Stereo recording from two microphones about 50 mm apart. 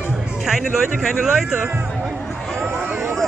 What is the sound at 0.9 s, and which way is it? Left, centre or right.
Speech, centre.